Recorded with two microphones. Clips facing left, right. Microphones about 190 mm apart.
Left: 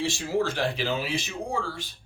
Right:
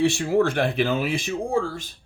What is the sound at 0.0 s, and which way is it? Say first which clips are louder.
Speech: right 7 dB; 60° right (ahead or behind).